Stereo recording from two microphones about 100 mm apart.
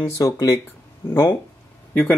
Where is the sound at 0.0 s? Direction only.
35° left (ahead or behind).